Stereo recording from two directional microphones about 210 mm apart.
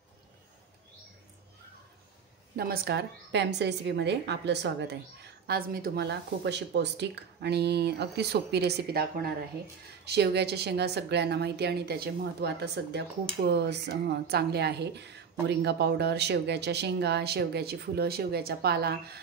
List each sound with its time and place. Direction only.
2.5 s a woman's voice: 45° right (ahead or behind)